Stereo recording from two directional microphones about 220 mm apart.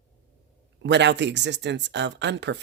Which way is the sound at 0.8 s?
50° right (ahead or behind).